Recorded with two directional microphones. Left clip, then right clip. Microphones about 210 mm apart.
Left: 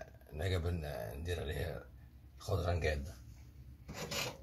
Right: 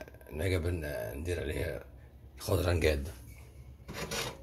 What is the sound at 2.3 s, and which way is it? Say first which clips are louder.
Speech: right 7 dB; 40° right (ahead or behind).